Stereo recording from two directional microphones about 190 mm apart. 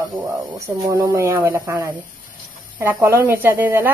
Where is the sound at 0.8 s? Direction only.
15° right (ahead or behind).